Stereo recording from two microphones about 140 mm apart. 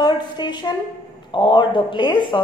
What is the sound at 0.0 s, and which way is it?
A woman's voice, 30° left (ahead or behind).